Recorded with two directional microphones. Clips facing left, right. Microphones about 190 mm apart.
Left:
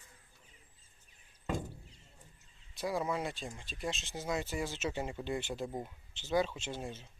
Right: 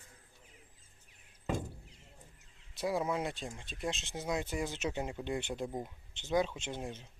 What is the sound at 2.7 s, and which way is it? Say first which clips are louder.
Speech: right 1 dB; centre (ahead or behind).